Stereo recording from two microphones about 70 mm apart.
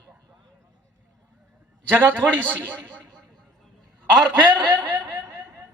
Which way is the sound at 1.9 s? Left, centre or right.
Right.